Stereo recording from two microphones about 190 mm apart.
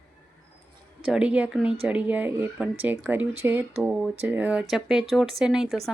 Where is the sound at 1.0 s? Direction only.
5° right (ahead or behind).